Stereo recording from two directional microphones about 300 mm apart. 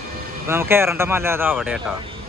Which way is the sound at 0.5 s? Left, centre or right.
Centre.